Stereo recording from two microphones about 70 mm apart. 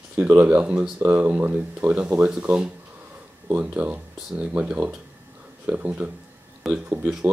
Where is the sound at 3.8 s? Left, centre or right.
Centre.